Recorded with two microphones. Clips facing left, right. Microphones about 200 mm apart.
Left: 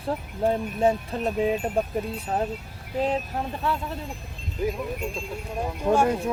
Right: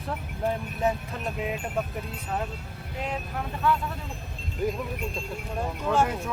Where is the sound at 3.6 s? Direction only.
30° left (ahead or behind).